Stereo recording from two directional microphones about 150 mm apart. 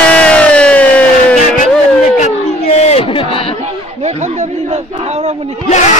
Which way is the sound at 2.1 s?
50° left (ahead or behind).